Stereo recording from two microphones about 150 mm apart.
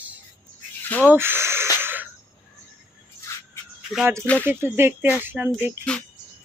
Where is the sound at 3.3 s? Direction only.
20° left (ahead or behind).